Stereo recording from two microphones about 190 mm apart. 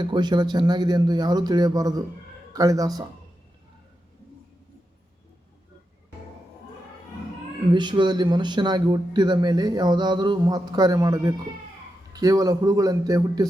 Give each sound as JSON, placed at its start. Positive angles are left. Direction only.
{"t": 0.0, "sound": "speech", "side_deg": -25}
{"t": 7.7, "sound": "speech", "side_deg": -25}